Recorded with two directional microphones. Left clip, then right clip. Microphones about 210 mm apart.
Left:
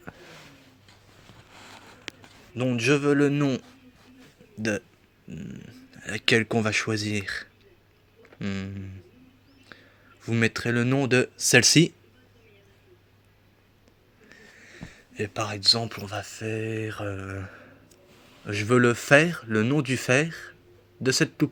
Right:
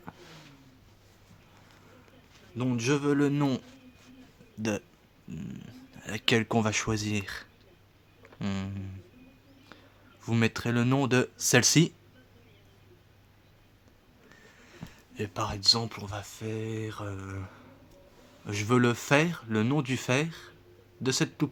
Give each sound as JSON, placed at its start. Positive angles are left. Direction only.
{"t": 2.6, "sound": "speech", "side_deg": 0}
{"t": 14.3, "sound": "speech", "side_deg": -10}